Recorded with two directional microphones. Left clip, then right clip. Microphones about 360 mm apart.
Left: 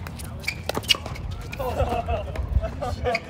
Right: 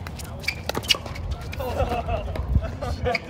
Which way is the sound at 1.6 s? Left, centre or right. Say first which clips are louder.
Left 1 dB; centre.